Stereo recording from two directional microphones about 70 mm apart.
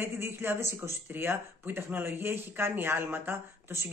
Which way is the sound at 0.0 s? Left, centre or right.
Right.